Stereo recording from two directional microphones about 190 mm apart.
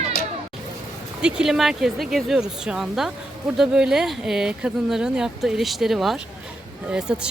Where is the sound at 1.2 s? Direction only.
5° right (ahead or behind).